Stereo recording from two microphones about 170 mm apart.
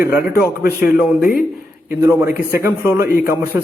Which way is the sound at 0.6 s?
60° left (ahead or behind).